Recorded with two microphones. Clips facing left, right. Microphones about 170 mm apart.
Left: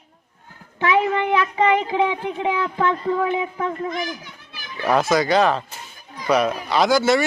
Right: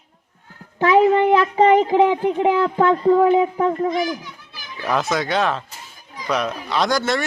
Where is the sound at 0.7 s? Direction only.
40° right (ahead or behind).